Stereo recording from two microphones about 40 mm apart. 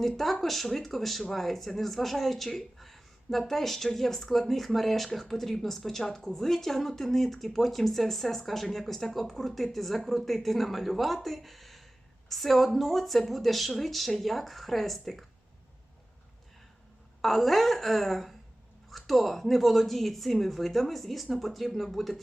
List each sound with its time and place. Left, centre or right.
0.4 s speech: centre
17.2 s speech: centre